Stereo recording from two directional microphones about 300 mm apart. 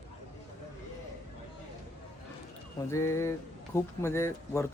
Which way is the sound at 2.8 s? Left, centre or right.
Centre.